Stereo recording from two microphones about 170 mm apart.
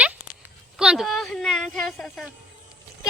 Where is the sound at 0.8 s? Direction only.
5° right (ahead or behind).